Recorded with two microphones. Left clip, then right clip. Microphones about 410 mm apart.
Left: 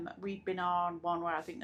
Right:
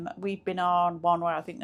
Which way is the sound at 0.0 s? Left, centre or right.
Right.